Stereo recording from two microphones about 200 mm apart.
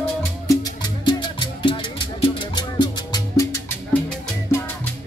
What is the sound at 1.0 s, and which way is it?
Music, 20° left (ahead or behind).